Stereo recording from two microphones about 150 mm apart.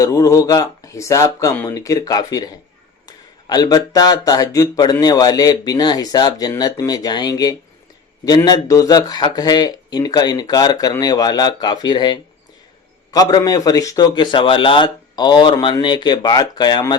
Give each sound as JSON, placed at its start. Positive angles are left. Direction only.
{"t": 0.0, "sound": "speech", "side_deg": 20}